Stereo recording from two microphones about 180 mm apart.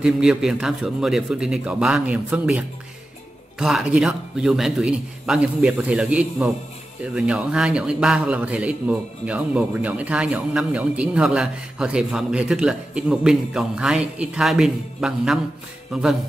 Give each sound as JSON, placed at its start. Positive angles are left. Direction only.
{"t": 0.0, "sound": "a man's voice", "side_deg": -5}